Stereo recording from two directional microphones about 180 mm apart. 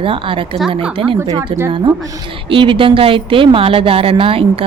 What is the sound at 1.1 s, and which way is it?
Speech, 15° right (ahead or behind).